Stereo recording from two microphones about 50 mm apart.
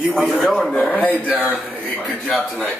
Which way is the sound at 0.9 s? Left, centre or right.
Left.